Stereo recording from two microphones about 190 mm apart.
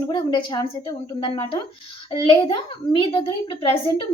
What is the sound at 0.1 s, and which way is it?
A child's voice, 25° left (ahead or behind).